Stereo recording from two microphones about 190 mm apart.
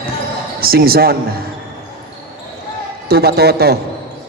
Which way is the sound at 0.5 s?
50° right (ahead or behind).